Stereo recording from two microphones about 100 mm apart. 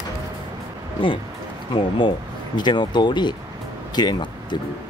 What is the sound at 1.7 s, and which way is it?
Speech, 55° left (ahead or behind).